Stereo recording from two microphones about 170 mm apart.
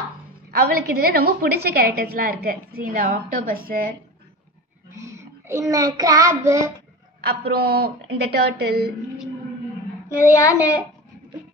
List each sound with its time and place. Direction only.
0.5 s a woman's voice: 60° right (ahead or behind)
5.0 s child singing: 15° right (ahead or behind)
7.2 s a woman's voice: 65° right (ahead or behind)
10.0 s child singing: 15° left (ahead or behind)